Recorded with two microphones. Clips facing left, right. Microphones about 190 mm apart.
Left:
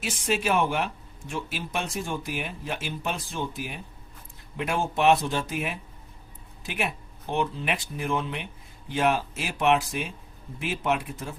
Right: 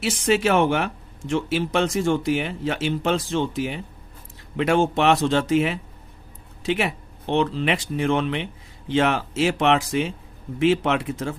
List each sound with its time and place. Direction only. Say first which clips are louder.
0.0 s speech: right 7 dB; 75° right (ahead or behind)